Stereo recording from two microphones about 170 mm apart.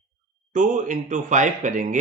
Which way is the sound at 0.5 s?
50° right (ahead or behind).